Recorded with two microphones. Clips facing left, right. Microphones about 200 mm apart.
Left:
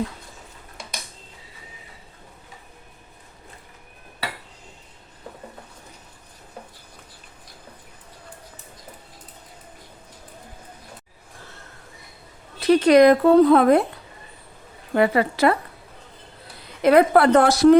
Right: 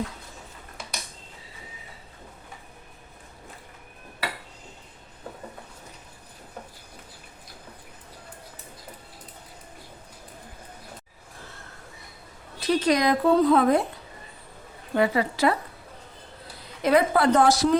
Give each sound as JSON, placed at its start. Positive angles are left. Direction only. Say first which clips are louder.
{"t": 12.5, "sound": "speech", "louder": "left 9 dB", "side_deg": 65}
{"t": 14.9, "sound": "speech", "louder": "left 4 dB", "side_deg": 60}
{"t": 16.8, "sound": "speech", "louder": "left 5 dB", "side_deg": 60}